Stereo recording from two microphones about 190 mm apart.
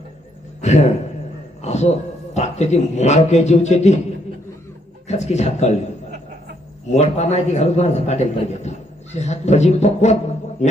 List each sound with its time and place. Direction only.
0.6 s speech: 35° left (ahead or behind)
5.0 s speech: 35° left (ahead or behind)
6.8 s speech: 35° left (ahead or behind)